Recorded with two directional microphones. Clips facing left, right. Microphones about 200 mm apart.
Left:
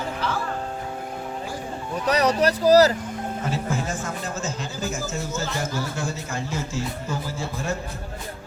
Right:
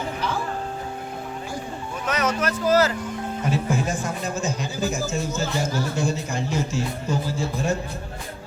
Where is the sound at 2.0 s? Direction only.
35° left (ahead or behind).